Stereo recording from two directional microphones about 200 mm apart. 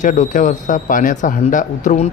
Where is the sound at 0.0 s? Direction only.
40° left (ahead or behind).